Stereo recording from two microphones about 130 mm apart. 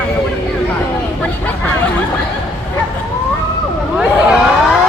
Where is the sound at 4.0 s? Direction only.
5° right (ahead or behind).